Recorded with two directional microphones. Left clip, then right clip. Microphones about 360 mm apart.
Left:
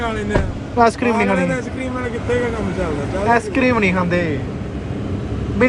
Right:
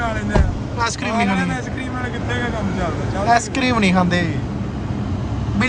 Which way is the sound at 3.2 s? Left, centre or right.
Centre.